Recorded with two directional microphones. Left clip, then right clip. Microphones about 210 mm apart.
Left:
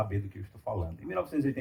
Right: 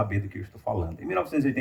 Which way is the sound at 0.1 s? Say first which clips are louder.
Right 6 dB; 30° right (ahead or behind).